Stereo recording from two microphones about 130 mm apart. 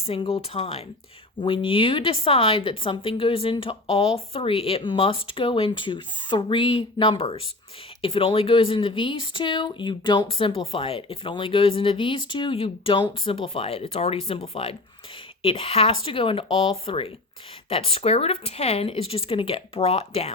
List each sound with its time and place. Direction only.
0.0 s a woman's voice: 45° left (ahead or behind)